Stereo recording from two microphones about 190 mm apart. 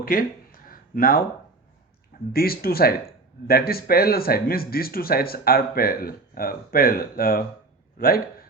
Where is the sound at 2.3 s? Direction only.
50° left (ahead or behind).